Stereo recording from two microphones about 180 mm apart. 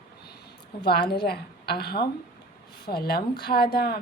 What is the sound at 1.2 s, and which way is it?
A woman's voice, 60° left (ahead or behind).